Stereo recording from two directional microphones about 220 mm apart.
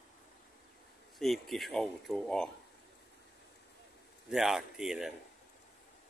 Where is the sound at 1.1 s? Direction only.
Centre (ahead or behind).